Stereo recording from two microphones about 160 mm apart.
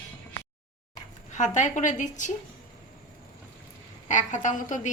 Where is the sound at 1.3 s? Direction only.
50° left (ahead or behind).